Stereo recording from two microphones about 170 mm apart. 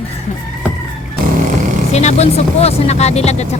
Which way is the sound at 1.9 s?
40° left (ahead or behind).